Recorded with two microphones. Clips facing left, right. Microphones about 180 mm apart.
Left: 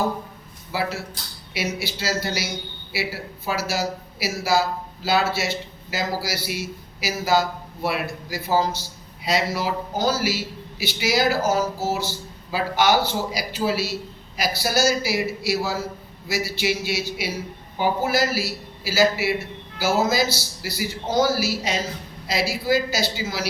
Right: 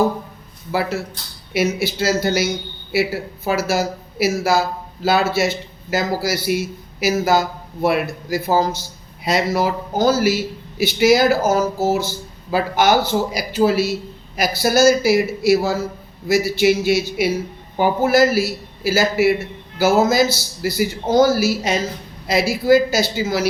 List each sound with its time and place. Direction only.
0.7 s a man's voice: 55° right (ahead or behind)